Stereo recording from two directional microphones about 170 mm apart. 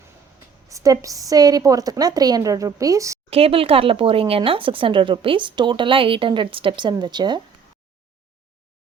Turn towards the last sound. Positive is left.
turn(degrees=-25)  # may be behind; listen again after turning